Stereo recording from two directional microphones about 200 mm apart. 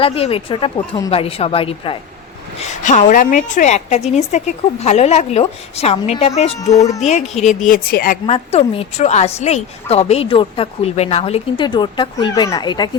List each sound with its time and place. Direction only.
0.0 s a woman's voice: 30° left (ahead or behind)
2.6 s a woman's voice: 40° left (ahead or behind)
6.7 s speech: 15° left (ahead or behind)
7.0 s a woman's voice: 35° left (ahead or behind)
8.3 s a woman's voice: 30° left (ahead or behind)